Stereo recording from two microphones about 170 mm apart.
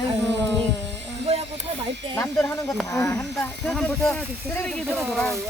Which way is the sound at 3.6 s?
5° left (ahead or behind).